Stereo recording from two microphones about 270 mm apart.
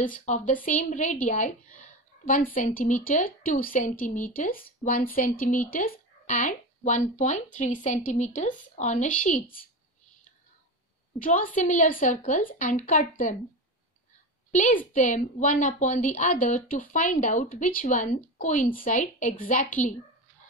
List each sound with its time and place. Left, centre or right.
0.2 s speech: left
2.5 s a woman's voice: left
11.1 s speech: left
14.5 s a woman's voice: left